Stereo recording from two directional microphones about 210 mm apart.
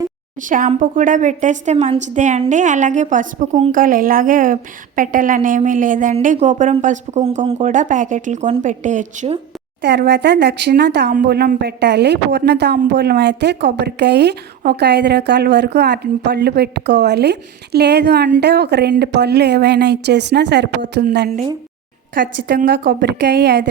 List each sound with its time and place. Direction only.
0.4 s a woman's voice: 40° right (ahead or behind)
9.8 s a woman's voice: 55° right (ahead or behind)
22.4 s a woman's voice: 45° right (ahead or behind)